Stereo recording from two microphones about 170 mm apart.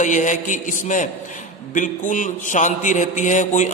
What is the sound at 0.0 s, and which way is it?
A man's voice, 45° left (ahead or behind).